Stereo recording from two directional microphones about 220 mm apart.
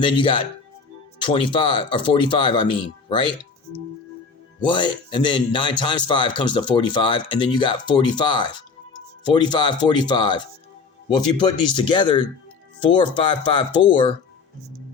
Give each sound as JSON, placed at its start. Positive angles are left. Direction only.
{"t": 0.0, "sound": "speech", "side_deg": 20}